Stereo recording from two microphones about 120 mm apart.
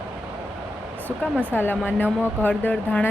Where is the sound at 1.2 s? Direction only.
15° left (ahead or behind).